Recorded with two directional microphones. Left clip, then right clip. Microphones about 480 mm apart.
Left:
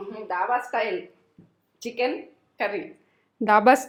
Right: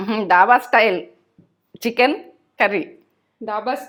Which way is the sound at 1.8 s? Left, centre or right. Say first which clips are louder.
Right 9 dB; right.